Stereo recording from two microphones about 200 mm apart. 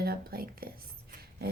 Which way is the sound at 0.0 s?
50° right (ahead or behind).